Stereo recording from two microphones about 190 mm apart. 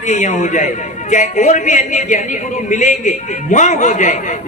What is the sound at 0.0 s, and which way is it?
A man's voice, 40° left (ahead or behind).